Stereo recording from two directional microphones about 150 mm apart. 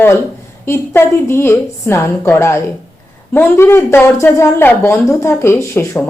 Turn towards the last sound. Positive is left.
turn(degrees=15)  # may be behind; listen again after turning